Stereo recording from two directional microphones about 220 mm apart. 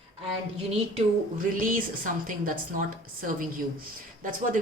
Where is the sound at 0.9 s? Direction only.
35° right (ahead or behind).